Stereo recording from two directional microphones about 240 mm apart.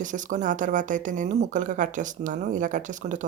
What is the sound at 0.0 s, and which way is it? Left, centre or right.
Speech, right.